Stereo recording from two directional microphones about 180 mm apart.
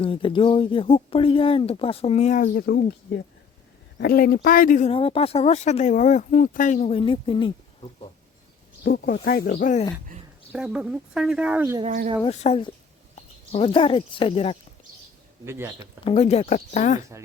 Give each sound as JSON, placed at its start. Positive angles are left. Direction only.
{"t": 0.0, "sound": "speech", "side_deg": 30}
{"t": 4.0, "sound": "speech", "side_deg": 55}
{"t": 4.9, "sound": "speech", "side_deg": 30}
{"t": 8.8, "sound": "speech", "side_deg": 60}
{"t": 10.5, "sound": "speech", "side_deg": -5}
{"t": 12.2, "sound": "speech", "side_deg": 35}
{"t": 15.4, "sound": "speech", "side_deg": -15}
{"t": 16.0, "sound": "speech", "side_deg": 35}